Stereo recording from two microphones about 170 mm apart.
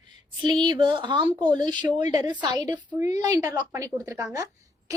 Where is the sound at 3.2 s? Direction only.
20° right (ahead or behind).